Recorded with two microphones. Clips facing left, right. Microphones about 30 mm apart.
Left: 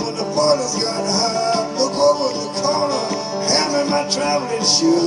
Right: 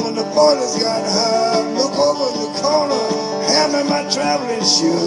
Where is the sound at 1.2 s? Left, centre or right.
Centre.